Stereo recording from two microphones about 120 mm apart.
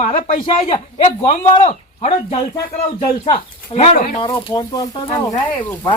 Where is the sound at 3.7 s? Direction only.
55° left (ahead or behind).